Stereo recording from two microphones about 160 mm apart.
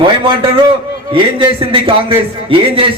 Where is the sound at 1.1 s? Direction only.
35° right (ahead or behind).